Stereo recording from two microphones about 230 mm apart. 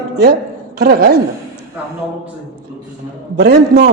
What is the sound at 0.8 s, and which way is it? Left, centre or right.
Speech, right.